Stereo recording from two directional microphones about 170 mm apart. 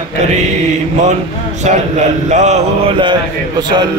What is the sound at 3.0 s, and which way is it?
Mantra, 25° right (ahead or behind).